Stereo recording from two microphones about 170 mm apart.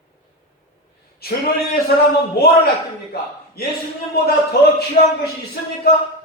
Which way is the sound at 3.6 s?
65° left (ahead or behind).